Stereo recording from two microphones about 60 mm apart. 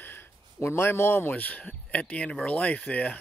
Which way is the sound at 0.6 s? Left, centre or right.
Left.